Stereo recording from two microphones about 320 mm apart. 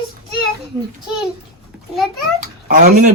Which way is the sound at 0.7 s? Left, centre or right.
Centre.